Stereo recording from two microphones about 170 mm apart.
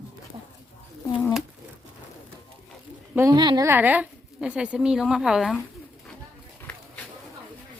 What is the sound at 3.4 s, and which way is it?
A woman's voice, 25° right (ahead or behind).